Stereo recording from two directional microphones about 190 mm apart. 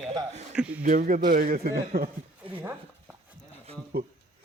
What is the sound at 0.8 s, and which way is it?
Speech, 40° right (ahead or behind).